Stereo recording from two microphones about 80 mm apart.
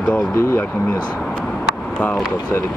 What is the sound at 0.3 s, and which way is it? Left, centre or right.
Speech, left.